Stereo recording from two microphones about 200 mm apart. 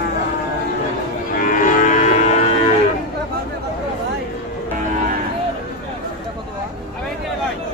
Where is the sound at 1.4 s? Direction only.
40° left (ahead or behind).